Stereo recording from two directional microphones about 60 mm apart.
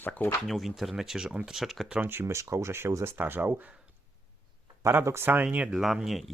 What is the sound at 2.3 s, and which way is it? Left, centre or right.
Speech, right.